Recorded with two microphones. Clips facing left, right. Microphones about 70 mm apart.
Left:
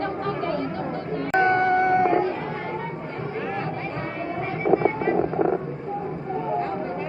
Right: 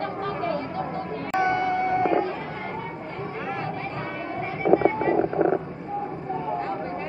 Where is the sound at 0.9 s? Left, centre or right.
Left.